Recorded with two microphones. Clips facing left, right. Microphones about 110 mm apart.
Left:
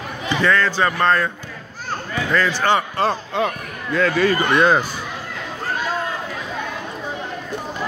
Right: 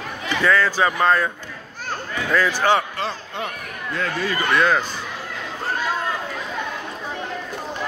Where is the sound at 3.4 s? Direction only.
90° left.